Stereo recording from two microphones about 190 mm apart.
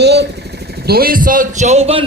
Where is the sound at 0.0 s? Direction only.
60° right (ahead or behind).